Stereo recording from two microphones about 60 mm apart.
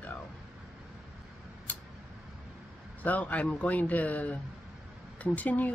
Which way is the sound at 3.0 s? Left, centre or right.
Left.